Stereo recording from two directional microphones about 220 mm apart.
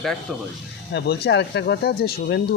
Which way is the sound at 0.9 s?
50° left (ahead or behind).